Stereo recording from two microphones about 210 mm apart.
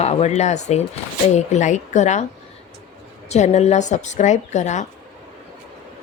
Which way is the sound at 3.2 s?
35° left (ahead or behind).